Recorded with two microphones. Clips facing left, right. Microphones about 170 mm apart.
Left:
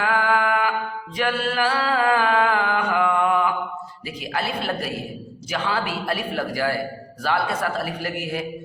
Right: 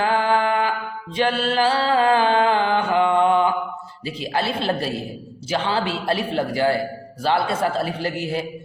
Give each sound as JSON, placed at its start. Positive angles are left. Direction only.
{"t": 0.0, "sound": "music", "side_deg": -30}
{"t": 4.0, "sound": "a man's voice", "side_deg": -30}